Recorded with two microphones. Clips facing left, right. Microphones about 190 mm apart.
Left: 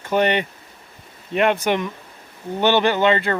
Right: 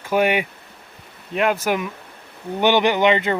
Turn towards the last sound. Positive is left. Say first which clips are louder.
# right 1 dB
turn(degrees=-15)  # may be behind; listen again after turning